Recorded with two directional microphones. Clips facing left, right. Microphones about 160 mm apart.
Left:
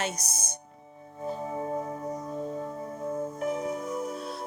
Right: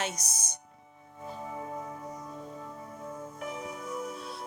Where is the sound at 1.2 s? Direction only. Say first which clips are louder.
Left 7 dB; 35° left (ahead or behind).